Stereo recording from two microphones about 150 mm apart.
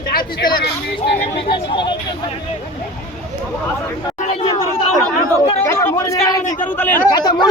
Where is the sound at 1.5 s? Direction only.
35° left (ahead or behind).